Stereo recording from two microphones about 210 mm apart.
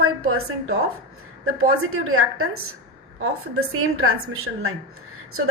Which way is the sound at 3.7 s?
90° right.